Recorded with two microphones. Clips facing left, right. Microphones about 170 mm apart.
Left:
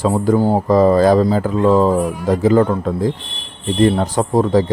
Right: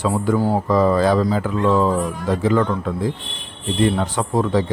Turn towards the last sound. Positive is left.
turn(degrees=40)  # may be behind; listen again after turning